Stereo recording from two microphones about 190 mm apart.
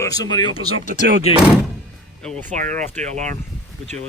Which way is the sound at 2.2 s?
5° left (ahead or behind).